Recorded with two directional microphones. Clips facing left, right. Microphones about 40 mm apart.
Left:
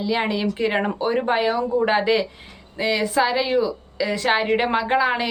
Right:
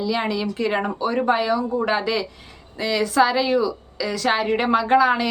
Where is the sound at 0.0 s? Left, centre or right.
Left.